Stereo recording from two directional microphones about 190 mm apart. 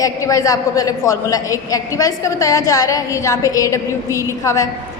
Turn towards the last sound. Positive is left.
turn(degrees=15)  # may be behind; listen again after turning